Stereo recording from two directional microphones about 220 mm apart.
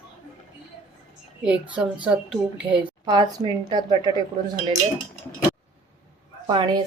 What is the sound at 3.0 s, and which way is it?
A woman's voice, 20° right (ahead or behind).